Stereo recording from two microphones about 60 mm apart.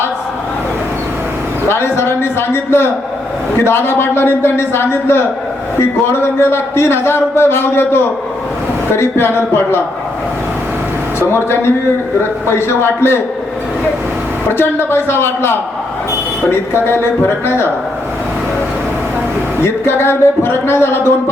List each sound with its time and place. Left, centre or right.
1.6 s a man's voice: left
11.2 s a man's voice: left
14.6 s a man's voice: left
19.6 s a man's voice: left